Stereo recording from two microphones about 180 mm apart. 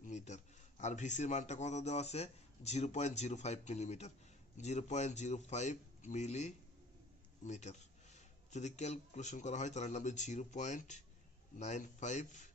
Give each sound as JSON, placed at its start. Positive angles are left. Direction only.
{"t": 0.0, "sound": "a man's voice", "side_deg": 40}